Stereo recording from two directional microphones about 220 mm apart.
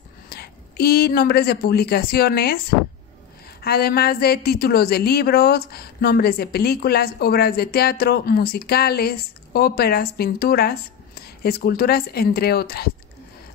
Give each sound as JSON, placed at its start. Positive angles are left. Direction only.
{"t": 0.3, "sound": "speech", "side_deg": 45}
{"t": 3.6, "sound": "a woman's voice", "side_deg": 45}